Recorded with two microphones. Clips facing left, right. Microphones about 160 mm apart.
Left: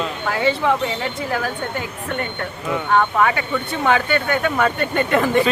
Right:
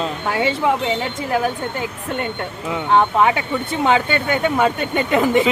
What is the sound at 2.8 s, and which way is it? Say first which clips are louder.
Speech: right 2 dB; 20° right (ahead or behind).